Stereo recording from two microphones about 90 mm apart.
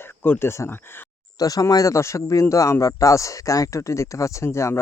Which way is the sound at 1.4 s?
40° left (ahead or behind).